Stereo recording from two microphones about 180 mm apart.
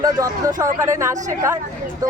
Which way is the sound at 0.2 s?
15° right (ahead or behind).